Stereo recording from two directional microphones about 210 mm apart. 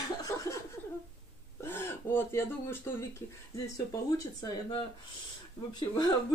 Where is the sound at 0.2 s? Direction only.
15° left (ahead or behind).